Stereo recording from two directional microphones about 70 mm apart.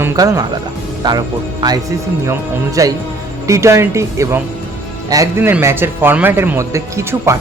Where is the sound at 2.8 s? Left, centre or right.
Right.